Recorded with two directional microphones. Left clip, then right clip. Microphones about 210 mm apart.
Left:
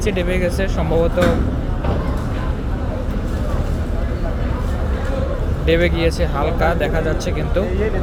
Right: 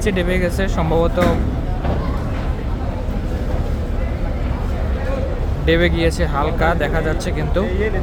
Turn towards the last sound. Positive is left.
turn(degrees=-15)  # may be behind; listen again after turning